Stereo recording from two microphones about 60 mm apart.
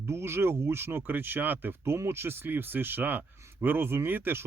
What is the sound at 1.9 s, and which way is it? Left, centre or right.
Speech, right.